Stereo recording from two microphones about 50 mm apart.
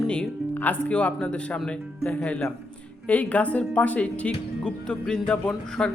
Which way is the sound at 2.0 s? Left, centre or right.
Left.